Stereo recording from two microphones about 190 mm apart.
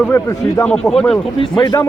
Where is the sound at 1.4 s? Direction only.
25° left (ahead or behind).